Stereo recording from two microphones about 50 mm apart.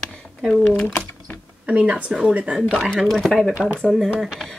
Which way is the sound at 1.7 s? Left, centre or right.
Right.